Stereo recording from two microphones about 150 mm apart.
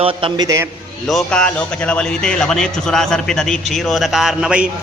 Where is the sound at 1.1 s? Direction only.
5° left (ahead or behind).